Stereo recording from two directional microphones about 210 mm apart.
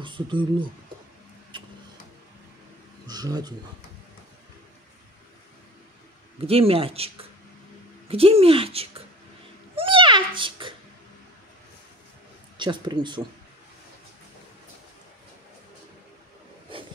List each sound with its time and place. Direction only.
0.0 s speech: 25° right (ahead or behind)
1.5 s music: 20° right (ahead or behind)
3.1 s speech: 20° right (ahead or behind)
6.4 s speech: 25° right (ahead or behind)
9.8 s a sound: 25° right (ahead or behind)
12.5 s speech: 20° right (ahead or behind)